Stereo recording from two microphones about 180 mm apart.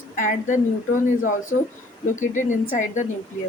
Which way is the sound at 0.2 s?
45° left (ahead or behind).